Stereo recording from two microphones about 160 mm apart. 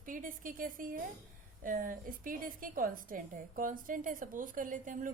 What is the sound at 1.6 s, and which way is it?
A woman's voice, 60° right (ahead or behind).